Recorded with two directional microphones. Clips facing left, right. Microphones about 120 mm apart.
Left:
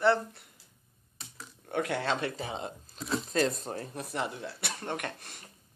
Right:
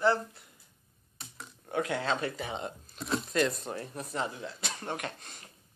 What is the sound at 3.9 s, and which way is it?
Speech, 60° left (ahead or behind).